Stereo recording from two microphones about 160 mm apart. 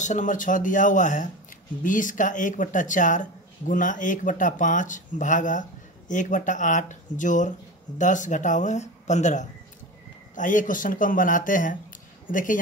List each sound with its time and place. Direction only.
0.0 s speech: 50° left (ahead or behind)